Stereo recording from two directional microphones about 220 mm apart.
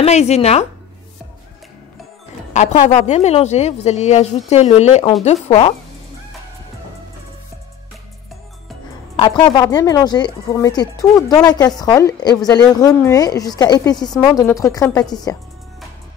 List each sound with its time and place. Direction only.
0.0 s speech: 30° left (ahead or behind)
2.5 s a woman's voice: 35° left (ahead or behind)
9.1 s a woman's voice: 20° left (ahead or behind)